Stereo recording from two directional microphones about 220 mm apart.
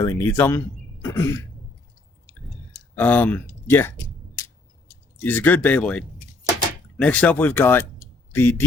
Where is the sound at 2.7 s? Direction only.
10° left (ahead or behind).